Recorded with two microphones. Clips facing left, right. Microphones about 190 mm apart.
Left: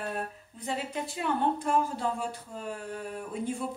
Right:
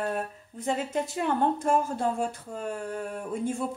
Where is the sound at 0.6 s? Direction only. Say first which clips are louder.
Right 5 dB; 45° right (ahead or behind).